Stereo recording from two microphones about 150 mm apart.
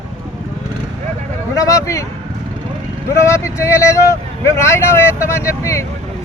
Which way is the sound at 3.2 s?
20° left (ahead or behind).